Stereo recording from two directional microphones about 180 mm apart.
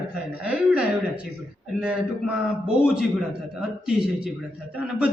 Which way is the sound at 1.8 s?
5° right (ahead or behind).